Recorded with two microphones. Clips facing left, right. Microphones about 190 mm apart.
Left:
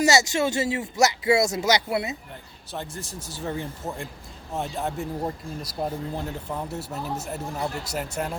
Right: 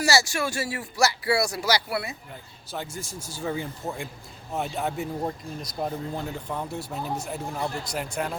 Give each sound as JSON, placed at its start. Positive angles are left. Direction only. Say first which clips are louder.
{"t": 0.0, "sound": "speech", "louder": "left 3 dB", "side_deg": 20}
{"t": 2.7, "sound": "speech", "louder": "even", "side_deg": 0}